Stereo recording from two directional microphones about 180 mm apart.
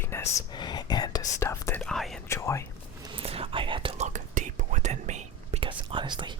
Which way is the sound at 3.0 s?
30° right (ahead or behind).